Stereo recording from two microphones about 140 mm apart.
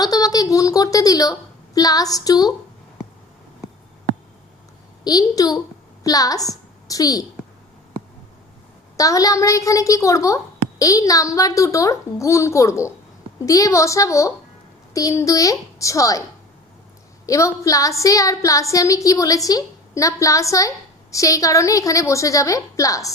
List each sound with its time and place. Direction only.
0.0 s a sound: 25° left (ahead or behind)
5.0 s a woman's voice: 25° left (ahead or behind)
9.0 s a woman's voice: 25° left (ahead or behind)
17.2 s a woman's voice: 20° left (ahead or behind)